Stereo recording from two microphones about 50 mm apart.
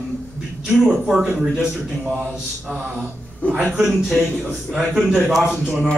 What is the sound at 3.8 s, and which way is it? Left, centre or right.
Speech, centre.